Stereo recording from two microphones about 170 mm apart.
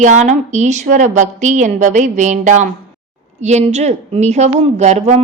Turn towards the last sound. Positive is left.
turn(degrees=-40)  # may be behind; listen again after turning